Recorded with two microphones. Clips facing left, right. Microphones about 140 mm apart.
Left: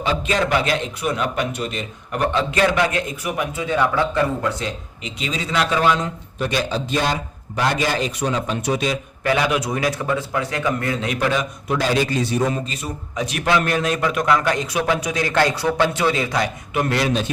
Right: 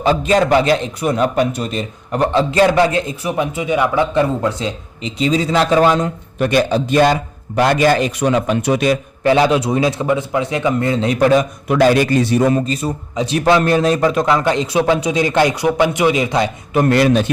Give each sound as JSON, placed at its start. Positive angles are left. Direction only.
{"t": 0.0, "sound": "a man's voice", "side_deg": -40}
{"t": 6.4, "sound": "a man's voice", "side_deg": -60}
{"t": 9.2, "sound": "a man's voice", "side_deg": -30}
{"t": 11.7, "sound": "a man's voice", "side_deg": -60}
{"t": 12.6, "sound": "a man's voice", "side_deg": -35}
{"t": 16.7, "sound": "a man's voice", "side_deg": -50}